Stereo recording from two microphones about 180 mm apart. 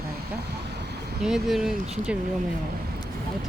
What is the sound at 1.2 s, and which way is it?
Speech, centre (ahead or behind).